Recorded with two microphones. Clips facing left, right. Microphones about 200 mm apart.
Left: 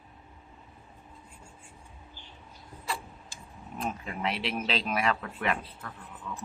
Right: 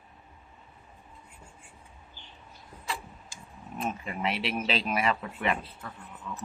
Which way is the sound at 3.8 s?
Centre (ahead or behind).